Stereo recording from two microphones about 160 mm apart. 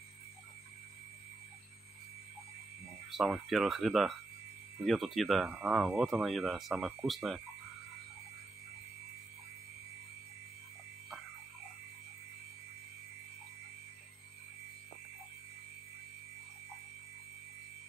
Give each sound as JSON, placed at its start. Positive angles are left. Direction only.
{"t": 3.1, "sound": "speech", "side_deg": 0}